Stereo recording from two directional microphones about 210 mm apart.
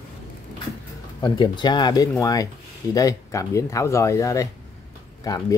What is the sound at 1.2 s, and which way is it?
Speech, 20° left (ahead or behind).